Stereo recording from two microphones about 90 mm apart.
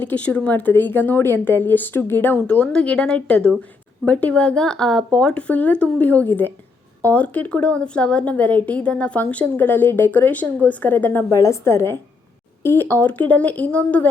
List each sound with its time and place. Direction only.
0.0 s a woman's voice: 15° left (ahead or behind)
11.3 s a woman's voice: 35° left (ahead or behind); by 14.1 s 15° left (ahead or behind)